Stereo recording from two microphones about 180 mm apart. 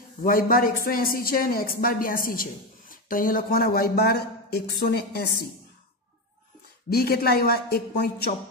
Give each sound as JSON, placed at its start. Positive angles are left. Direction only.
{"t": 0.2, "sound": "a woman's voice", "side_deg": 50}
{"t": 6.9, "sound": "a man's voice", "side_deg": 60}